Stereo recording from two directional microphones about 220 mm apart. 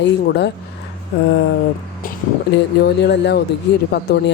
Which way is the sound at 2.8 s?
50° left (ahead or behind).